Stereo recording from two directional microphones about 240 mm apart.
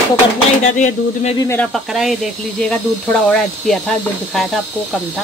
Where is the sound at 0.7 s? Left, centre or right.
Left.